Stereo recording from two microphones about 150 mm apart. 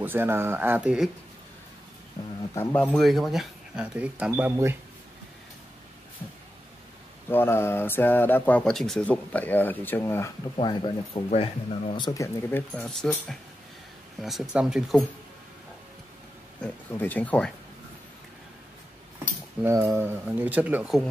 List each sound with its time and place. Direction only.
0.0 s speech: 15° right (ahead or behind)
2.7 s speech: 5° left (ahead or behind); by 4.6 s 10° right (ahead or behind)
7.2 s speech: 15° left (ahead or behind)
10.6 s speech: 30° left (ahead or behind)
12.1 s speech: 15° left (ahead or behind); by 15.0 s centre (ahead or behind)
16.6 s speech: 10° left (ahead or behind)
19.6 s speech: 20° right (ahead or behind)